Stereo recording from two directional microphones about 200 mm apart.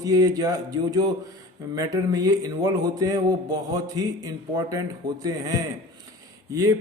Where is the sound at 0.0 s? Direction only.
20° right (ahead or behind).